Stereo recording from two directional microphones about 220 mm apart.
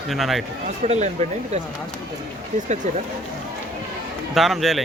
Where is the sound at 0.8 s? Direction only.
30° right (ahead or behind).